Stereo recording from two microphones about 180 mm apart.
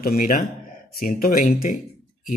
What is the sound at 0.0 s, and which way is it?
Speech, 50° left (ahead or behind).